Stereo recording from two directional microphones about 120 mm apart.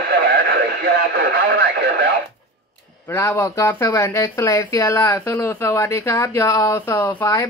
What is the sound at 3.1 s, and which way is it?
Speech, 20° left (ahead or behind).